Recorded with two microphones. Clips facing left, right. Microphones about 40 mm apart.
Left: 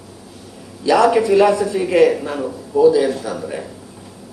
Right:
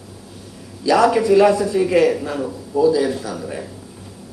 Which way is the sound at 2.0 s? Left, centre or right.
Centre.